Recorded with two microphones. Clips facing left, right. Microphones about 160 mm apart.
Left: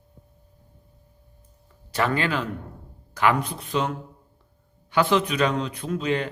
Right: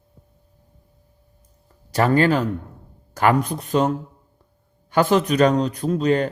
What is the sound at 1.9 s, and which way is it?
A man's voice, 40° right (ahead or behind).